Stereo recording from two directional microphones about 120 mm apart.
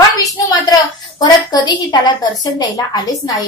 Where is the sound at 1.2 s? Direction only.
40° left (ahead or behind).